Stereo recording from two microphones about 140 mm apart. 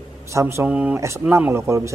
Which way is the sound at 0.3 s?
20° right (ahead or behind).